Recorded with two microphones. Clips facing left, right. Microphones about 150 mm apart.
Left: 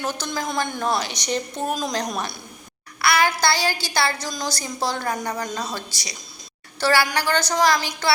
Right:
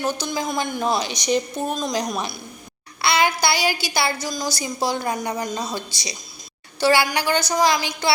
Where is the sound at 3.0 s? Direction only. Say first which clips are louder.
Even; 20° right (ahead or behind).